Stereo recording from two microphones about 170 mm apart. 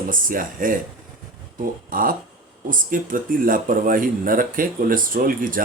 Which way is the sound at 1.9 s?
55° right (ahead or behind).